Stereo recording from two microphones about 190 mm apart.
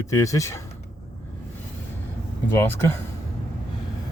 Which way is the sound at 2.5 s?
10° left (ahead or behind).